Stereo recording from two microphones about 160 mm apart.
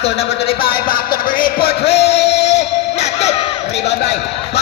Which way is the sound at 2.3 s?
90° left.